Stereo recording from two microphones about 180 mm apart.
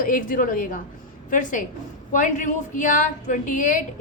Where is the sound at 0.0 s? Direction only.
50° left (ahead or behind).